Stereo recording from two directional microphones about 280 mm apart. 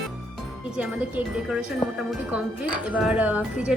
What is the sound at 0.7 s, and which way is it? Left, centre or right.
A woman's voice, centre.